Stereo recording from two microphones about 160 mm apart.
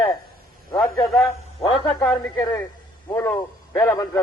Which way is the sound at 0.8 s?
Centre (ahead or behind).